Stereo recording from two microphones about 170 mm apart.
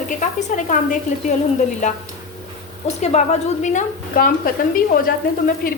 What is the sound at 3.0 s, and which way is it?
A woman's voice, 45° left (ahead or behind).